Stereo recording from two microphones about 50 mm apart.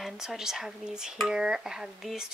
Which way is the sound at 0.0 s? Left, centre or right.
Centre.